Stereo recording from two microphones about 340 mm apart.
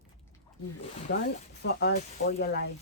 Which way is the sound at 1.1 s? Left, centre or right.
Left.